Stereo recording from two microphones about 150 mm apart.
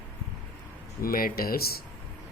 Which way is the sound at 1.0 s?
75° left (ahead or behind).